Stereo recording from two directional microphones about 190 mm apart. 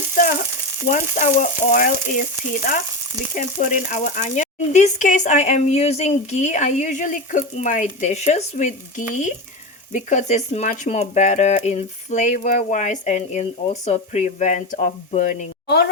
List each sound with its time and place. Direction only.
0.9 s speech: 40° left (ahead or behind)
3.3 s speech: 40° left (ahead or behind)
15.6 s speech: 60° left (ahead or behind)